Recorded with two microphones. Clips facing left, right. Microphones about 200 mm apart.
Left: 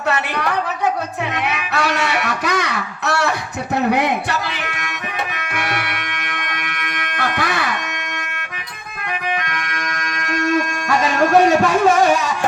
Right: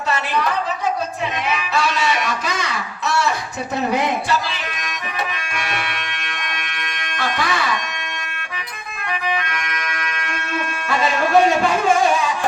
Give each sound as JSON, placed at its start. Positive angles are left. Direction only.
{"t": 0.1, "sound": "a sound", "side_deg": 65}
{"t": 1.5, "sound": "music", "side_deg": 65}
{"t": 6.5, "sound": "bagpipes", "side_deg": 60}
{"t": 9.5, "sound": "music", "side_deg": 45}